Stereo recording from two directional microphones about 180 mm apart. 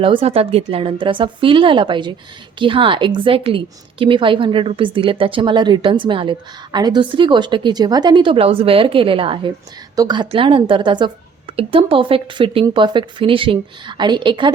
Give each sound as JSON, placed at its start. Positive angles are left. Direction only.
{"t": 0.0, "sound": "a woman's voice", "side_deg": -30}